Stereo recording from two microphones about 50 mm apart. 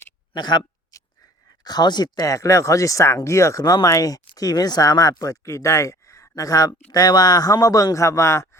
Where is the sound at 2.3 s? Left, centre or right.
Left.